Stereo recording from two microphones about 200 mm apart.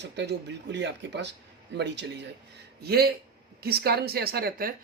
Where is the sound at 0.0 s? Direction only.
60° right (ahead or behind).